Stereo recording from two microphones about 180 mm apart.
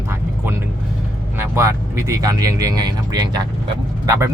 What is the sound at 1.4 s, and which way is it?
Speech, 15° right (ahead or behind).